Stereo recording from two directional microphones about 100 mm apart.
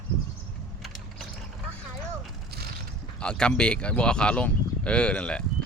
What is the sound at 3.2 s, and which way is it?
Speech, 10° left (ahead or behind).